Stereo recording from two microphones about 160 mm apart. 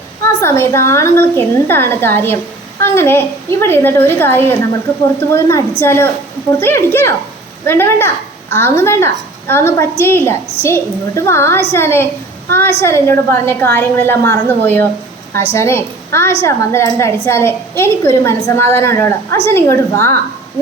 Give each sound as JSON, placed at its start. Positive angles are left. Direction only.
{"t": 0.2, "sound": "a woman's voice", "side_deg": 15}